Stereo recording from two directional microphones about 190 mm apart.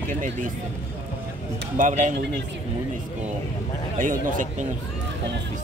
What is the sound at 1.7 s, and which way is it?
Speech, 40° right (ahead or behind).